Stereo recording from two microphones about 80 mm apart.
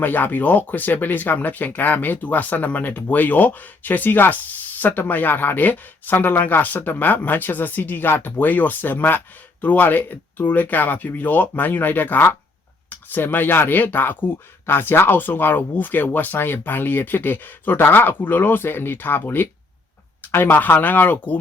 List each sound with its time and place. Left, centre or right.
0.0 s speech: left